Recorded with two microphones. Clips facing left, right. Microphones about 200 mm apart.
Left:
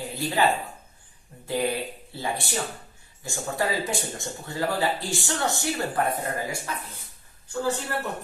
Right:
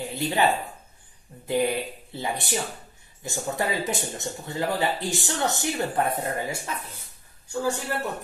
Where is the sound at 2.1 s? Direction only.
20° right (ahead or behind).